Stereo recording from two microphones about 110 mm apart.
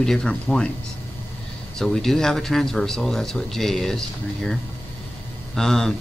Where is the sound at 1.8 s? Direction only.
5° left (ahead or behind).